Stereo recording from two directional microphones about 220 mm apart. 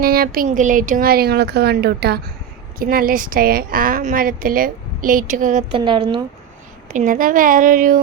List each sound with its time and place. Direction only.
0.0 s speech: 40° right (ahead or behind)
5.7 s a woman's voice: 20° right (ahead or behind)
6.9 s speech: 35° right (ahead or behind)